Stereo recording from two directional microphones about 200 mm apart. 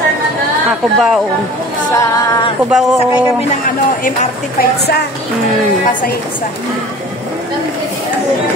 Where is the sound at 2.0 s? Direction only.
20° left (ahead or behind).